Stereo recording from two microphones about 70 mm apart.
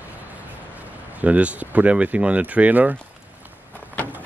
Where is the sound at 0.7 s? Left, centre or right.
Right.